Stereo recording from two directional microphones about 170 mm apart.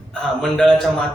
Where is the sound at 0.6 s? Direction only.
5° left (ahead or behind).